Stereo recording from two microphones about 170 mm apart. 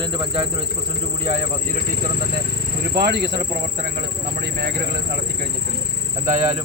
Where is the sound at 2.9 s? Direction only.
75° right (ahead or behind).